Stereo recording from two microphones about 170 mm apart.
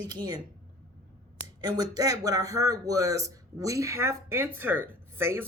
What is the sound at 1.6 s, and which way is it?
Speech, 20° right (ahead or behind).